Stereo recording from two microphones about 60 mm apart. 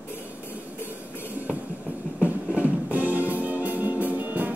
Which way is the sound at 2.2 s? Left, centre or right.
Right.